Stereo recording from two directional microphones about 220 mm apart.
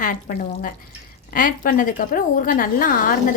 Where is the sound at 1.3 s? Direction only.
40° left (ahead or behind).